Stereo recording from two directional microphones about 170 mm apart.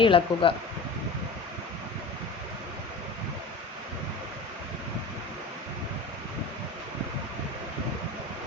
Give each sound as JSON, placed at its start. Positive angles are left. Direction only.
{"t": 0.0, "sound": "speech", "side_deg": 30}